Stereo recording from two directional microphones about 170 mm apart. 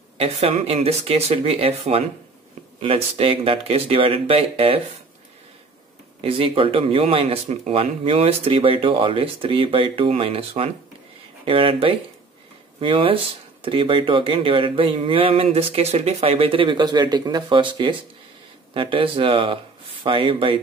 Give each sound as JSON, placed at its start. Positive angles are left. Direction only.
{"t": 0.2, "sound": "speech", "side_deg": -40}
{"t": 6.2, "sound": "speech", "side_deg": -35}